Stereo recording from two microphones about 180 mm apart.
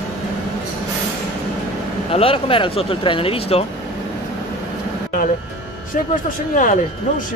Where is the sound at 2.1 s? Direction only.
30° left (ahead or behind).